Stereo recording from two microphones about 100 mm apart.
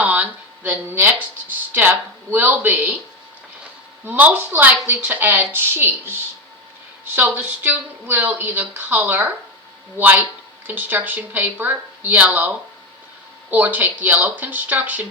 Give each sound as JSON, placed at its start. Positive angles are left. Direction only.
{"t": 0.0, "sound": "speech", "side_deg": -15}
{"t": 4.0, "sound": "speech", "side_deg": -15}